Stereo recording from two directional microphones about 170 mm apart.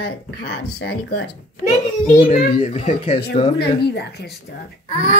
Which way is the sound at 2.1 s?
35° left (ahead or behind).